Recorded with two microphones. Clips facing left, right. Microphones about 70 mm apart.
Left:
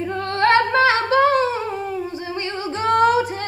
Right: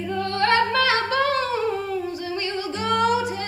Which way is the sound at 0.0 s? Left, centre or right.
Left.